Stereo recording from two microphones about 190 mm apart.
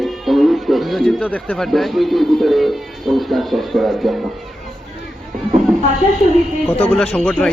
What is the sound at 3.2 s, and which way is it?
Speech, centre (ahead or behind).